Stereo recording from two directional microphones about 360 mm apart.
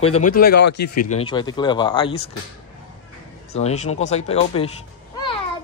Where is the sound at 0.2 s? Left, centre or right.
Left.